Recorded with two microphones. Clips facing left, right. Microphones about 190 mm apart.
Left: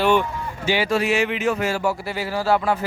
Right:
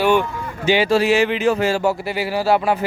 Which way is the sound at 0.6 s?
20° right (ahead or behind).